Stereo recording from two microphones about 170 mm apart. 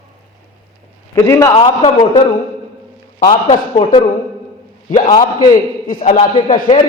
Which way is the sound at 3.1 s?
40° left (ahead or behind).